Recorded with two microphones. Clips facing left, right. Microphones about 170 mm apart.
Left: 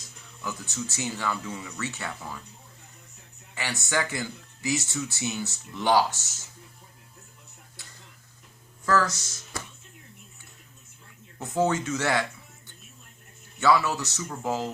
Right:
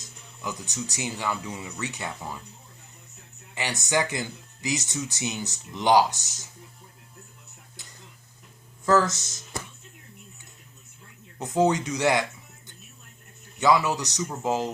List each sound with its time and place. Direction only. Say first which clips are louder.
0.4 s speech: right 1 dB; 15° right (ahead or behind)
3.5 s speech: right 3 dB; 20° right (ahead or behind)
7.8 s a sound: even; 20° right (ahead or behind)
8.9 s speech: right 3 dB; 20° right (ahead or behind)
11.3 s speech: right 3 dB; 20° right (ahead or behind)
13.6 s speech: right 1 dB; 15° right (ahead or behind)